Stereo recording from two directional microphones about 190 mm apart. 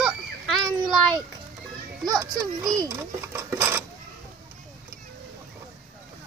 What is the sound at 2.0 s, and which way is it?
A child's voice, 20° right (ahead or behind).